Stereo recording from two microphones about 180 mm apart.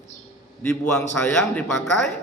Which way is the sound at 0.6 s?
5° left (ahead or behind).